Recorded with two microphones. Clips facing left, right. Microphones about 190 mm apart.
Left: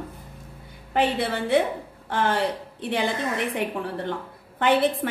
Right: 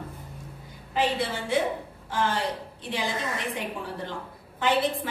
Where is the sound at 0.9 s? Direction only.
60° left (ahead or behind).